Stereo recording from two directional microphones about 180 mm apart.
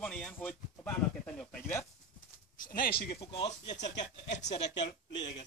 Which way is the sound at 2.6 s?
55° left (ahead or behind).